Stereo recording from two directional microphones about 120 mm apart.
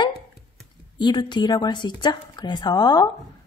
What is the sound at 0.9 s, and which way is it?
A woman's voice, 40° left (ahead or behind).